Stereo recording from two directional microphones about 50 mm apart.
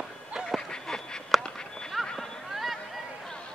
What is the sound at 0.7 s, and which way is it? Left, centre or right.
Duck, centre.